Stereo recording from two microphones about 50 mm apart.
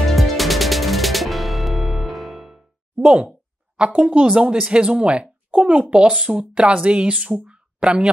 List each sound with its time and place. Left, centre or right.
0.1 s music: centre
3.2 s a sound: right
4.3 s a child's voice: centre
6.1 s speech: centre
6.5 s a child's voice: right
7.4 s a sound: centre